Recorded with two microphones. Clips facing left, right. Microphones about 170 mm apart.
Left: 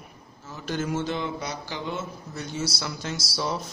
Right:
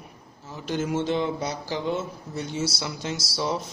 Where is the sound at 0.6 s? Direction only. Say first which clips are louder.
Right 2 dB; 20° right (ahead or behind).